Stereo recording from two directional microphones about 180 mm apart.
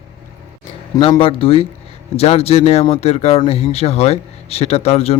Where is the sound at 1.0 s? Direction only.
30° left (ahead or behind).